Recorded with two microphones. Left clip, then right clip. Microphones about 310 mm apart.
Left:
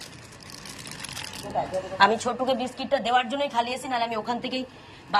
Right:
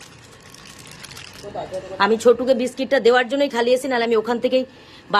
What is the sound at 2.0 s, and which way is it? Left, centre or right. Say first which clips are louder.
A woman's voice: right 6 dB; centre.